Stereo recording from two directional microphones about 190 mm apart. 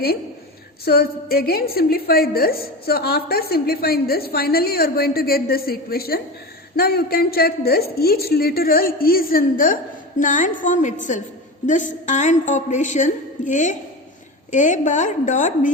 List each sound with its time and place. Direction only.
0.9 s a woman's voice: 55° left (ahead or behind)